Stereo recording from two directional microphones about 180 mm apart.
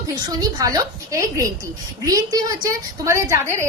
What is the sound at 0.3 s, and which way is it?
A woman's voice, 20° right (ahead or behind).